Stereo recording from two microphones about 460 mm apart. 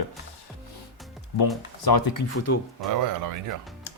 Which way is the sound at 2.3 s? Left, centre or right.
Left.